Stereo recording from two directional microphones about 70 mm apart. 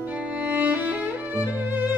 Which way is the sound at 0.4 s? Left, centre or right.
Right.